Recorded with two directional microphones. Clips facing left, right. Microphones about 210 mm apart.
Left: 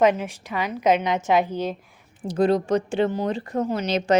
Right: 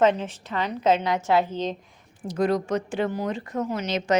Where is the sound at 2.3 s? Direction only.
30° left (ahead or behind).